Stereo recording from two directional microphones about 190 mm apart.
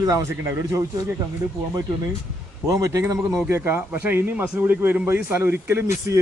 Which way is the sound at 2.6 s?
15° right (ahead or behind).